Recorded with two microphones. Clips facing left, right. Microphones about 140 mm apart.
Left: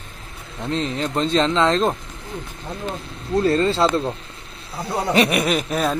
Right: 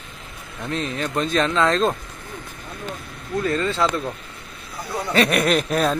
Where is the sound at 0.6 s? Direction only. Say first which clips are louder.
Left 2 dB; 25° left (ahead or behind).